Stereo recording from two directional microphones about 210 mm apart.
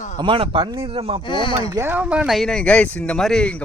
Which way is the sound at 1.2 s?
20° left (ahead or behind).